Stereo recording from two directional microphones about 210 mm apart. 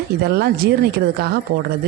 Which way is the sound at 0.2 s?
50° right (ahead or behind).